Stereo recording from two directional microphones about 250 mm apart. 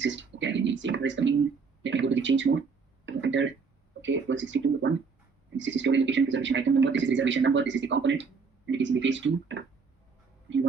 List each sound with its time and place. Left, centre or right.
0.0 s speech: right